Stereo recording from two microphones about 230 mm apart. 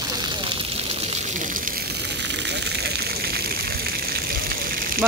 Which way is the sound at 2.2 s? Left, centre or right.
Right.